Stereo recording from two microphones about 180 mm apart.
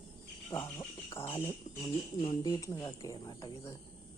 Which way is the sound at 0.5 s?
15° left (ahead or behind).